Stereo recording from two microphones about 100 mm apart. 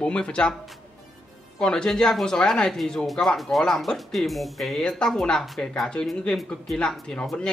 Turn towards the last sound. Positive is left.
turn(degrees=10)  # may be behind; listen again after turning